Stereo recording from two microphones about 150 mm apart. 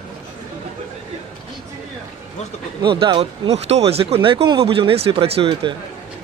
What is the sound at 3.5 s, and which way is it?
Speech, 45° right (ahead or behind).